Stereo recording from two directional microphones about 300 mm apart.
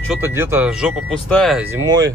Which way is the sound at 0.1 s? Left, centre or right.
Centre.